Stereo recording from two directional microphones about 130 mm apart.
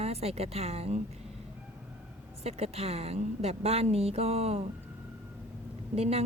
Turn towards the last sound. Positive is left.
turn(degrees=-50)  # may be behind; listen again after turning